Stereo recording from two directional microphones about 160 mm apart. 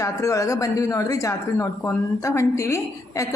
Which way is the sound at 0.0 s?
20° left (ahead or behind).